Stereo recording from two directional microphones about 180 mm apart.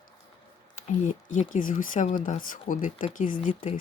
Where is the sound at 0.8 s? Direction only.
40° left (ahead or behind).